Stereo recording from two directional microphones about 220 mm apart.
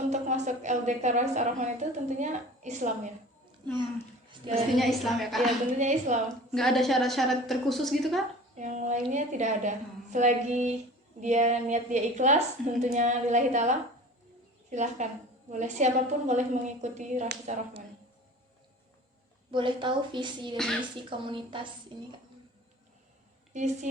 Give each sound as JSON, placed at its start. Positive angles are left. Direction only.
{"t": 0.1, "sound": "a woman's voice", "side_deg": -30}
{"t": 4.5, "sound": "a woman's voice", "side_deg": 0}
{"t": 5.8, "sound": "a woman's voice", "side_deg": -35}
{"t": 6.5, "sound": "a woman's voice", "side_deg": 0}
{"t": 8.5, "sound": "a woman's voice", "side_deg": -35}
{"t": 19.5, "sound": "a woman's voice", "side_deg": -20}
{"t": 23.5, "sound": "a woman's voice", "side_deg": -35}